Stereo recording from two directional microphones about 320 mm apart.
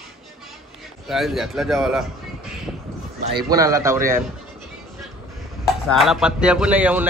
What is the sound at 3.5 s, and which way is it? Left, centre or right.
Speech, centre.